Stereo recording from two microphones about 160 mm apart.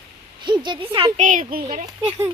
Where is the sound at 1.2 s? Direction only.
55° right (ahead or behind).